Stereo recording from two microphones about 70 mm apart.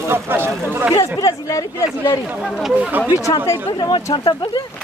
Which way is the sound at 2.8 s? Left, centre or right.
Right.